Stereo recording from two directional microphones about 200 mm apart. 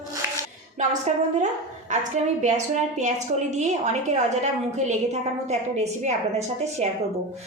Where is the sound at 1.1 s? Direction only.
35° right (ahead or behind).